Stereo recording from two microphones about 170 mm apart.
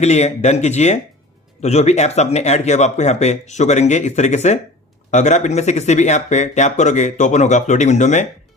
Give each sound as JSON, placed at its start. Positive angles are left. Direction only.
{"t": 0.0, "sound": "speech", "side_deg": 40}